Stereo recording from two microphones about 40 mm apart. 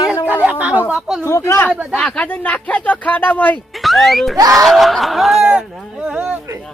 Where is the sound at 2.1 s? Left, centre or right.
Left.